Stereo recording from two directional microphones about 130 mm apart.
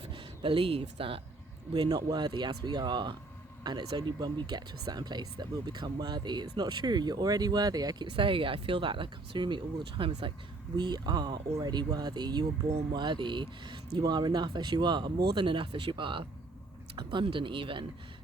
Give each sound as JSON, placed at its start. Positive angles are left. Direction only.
{"t": 0.1, "sound": "speech", "side_deg": -45}
{"t": 1.7, "sound": "speech", "side_deg": -30}
{"t": 8.1, "sound": "speech", "side_deg": -40}